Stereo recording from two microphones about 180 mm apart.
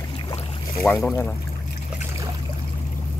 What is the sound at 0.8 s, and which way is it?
Speech, 10° left (ahead or behind).